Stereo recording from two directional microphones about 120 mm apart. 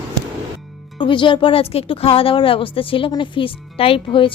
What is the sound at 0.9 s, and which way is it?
Speech, 45° left (ahead or behind).